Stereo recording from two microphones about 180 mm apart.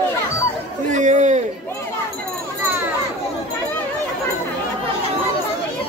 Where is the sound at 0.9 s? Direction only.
40° right (ahead or behind).